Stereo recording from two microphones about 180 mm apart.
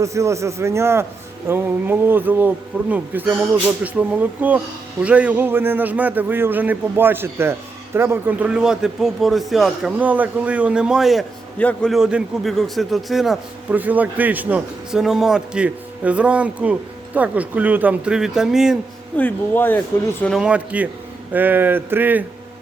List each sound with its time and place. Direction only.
0.0 s a man's voice: 15° right (ahead or behind)
19.1 s speech: 10° left (ahead or behind)
20.4 s a man's voice: 5° right (ahead or behind)